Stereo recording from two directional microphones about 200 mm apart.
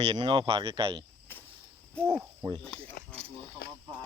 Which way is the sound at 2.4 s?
20° right (ahead or behind).